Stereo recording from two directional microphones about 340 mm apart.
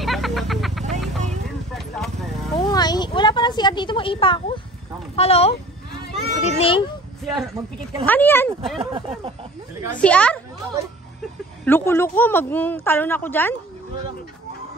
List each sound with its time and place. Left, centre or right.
0.0 s music: centre
1.7 s a sound: centre
5.1 s a child's voice: centre
8.0 s a woman's voice: centre
8.7 s speech: centre
9.9 s a woman's voice: centre
11.6 s a woman's voice: centre